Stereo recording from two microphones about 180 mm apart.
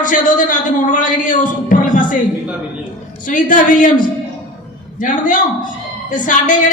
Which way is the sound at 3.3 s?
45° left (ahead or behind).